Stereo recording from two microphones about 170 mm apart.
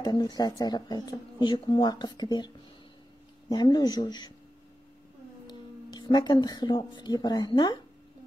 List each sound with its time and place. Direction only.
0.0 s speech: 25° left (ahead or behind)
5.5 s speech: 25° left (ahead or behind)